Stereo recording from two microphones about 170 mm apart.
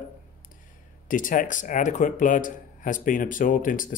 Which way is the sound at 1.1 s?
50° left (ahead or behind).